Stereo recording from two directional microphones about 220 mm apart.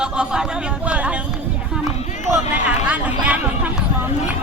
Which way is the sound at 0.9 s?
5° right (ahead or behind).